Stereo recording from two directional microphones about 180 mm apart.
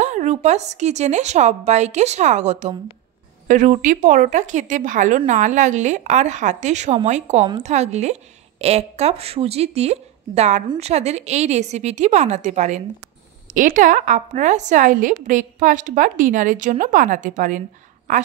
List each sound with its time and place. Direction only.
0.0 s a woman's voice: 40° right (ahead or behind)